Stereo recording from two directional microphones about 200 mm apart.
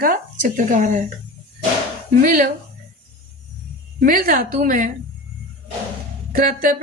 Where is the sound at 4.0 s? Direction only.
45° right (ahead or behind).